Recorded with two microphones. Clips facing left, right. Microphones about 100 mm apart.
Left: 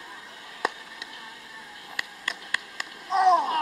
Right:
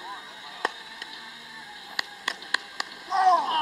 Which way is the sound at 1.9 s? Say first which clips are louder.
Right 1 dB; 15° right (ahead or behind).